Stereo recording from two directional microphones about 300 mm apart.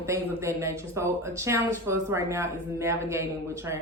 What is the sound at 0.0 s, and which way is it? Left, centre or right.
Speech, centre.